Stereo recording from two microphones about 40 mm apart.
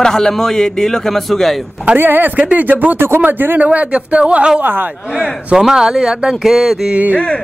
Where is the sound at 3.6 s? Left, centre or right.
Right.